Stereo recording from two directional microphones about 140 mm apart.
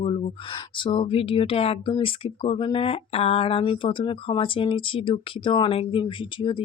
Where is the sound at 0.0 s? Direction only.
40° left (ahead or behind).